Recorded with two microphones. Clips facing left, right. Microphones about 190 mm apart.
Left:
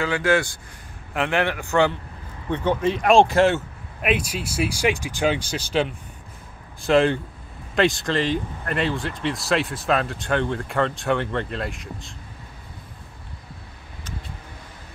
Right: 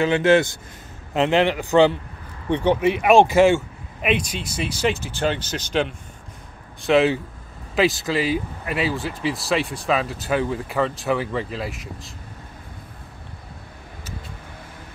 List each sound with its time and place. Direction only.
0.0 s a man's voice: 20° right (ahead or behind)
2.8 s speech: 10° right (ahead or behind)